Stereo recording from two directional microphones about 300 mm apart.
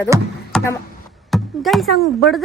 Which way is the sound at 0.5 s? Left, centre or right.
Centre.